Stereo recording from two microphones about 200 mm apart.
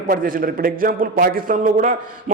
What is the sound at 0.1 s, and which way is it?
A man's voice, 45° right (ahead or behind).